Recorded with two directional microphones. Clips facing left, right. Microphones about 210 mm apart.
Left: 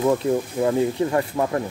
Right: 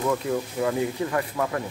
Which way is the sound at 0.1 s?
30° left (ahead or behind).